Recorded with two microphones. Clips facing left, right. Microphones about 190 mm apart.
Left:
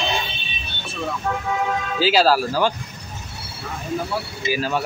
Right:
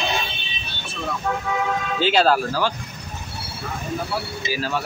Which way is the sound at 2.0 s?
5° left (ahead or behind).